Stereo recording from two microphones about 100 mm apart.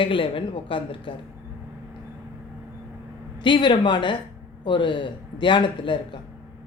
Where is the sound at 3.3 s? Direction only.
50° left (ahead or behind).